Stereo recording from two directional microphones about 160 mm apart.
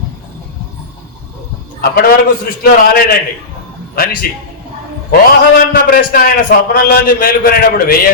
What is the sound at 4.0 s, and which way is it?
Speech, 65° left (ahead or behind).